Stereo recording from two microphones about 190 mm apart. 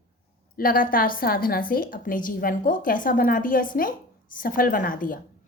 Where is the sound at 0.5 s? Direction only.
45° left (ahead or behind).